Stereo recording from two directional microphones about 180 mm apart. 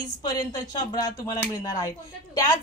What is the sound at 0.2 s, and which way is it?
A woman's voice, 20° left (ahead or behind).